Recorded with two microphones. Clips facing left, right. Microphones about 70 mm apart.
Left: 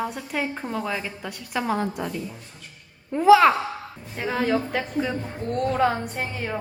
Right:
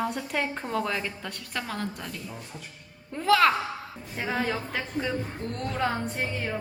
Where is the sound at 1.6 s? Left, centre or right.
Centre.